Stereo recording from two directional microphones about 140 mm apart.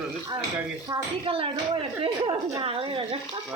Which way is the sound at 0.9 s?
30° right (ahead or behind).